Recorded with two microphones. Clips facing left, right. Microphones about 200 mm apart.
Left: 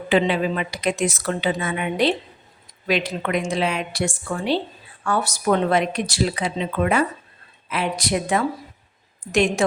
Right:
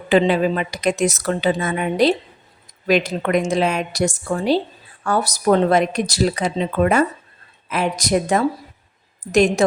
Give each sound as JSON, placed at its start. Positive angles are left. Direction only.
{"t": 0.1, "sound": "a woman's voice", "side_deg": -40}